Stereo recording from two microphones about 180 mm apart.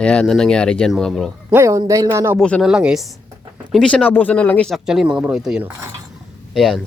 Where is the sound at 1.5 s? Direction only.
15° right (ahead or behind).